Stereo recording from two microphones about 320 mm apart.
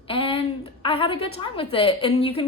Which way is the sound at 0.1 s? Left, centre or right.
Centre.